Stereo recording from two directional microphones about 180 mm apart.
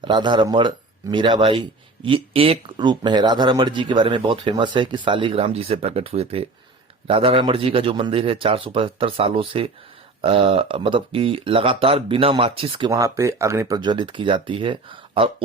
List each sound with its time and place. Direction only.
0.0 s speech: 25° right (ahead or behind)
12.9 s speech: 15° right (ahead or behind)